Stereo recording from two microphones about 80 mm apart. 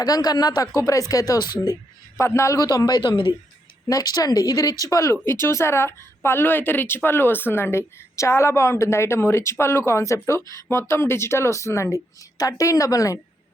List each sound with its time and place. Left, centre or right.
0.0 s speech: left
2.1 s speech: left
3.0 s speech: left
3.8 s speech: left
5.1 s speech: left